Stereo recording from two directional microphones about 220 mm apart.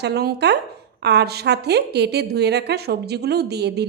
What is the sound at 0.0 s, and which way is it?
A woman's voice, 45° right (ahead or behind).